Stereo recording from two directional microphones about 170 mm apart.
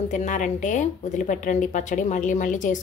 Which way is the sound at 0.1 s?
45° left (ahead or behind).